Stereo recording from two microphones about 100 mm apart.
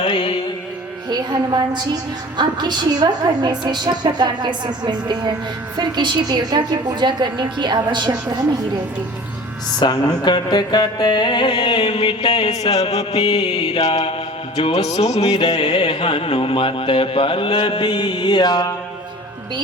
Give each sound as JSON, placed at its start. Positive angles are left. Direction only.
{"t": 0.0, "sound": "music", "side_deg": 55}
{"t": 1.1, "sound": "a sound", "side_deg": -45}
{"t": 2.4, "sound": "a woman's voice", "side_deg": -45}
{"t": 9.8, "sound": "music", "side_deg": 45}
{"t": 13.1, "sound": "music", "side_deg": 45}
{"t": 13.6, "sound": "mantra", "side_deg": 65}
{"t": 14.5, "sound": "music", "side_deg": 90}
{"t": 15.7, "sound": "speech", "side_deg": 60}